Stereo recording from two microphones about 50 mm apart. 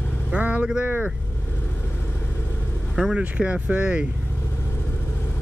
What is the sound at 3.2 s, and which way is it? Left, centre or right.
Speech, right.